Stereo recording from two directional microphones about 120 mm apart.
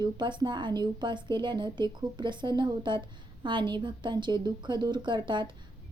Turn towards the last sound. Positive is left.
turn(degrees=-40)  # may be behind; listen again after turning